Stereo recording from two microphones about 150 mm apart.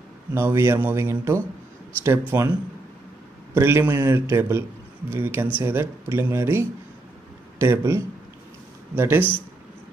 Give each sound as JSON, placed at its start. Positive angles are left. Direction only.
{"t": 0.3, "sound": "speech", "side_deg": -20}
{"t": 3.5, "sound": "speech", "side_deg": -15}